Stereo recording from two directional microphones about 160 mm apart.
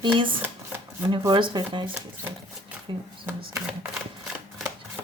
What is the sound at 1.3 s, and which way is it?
Speech, 30° right (ahead or behind).